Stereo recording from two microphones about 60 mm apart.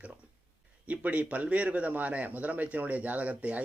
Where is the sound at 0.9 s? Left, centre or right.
Right.